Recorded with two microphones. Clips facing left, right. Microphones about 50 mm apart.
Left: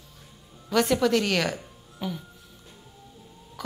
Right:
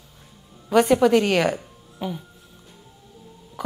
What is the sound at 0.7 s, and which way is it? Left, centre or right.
Speech, centre.